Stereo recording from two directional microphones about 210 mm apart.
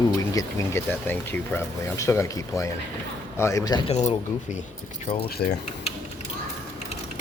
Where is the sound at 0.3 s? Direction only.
10° left (ahead or behind); by 5.2 s 30° left (ahead or behind).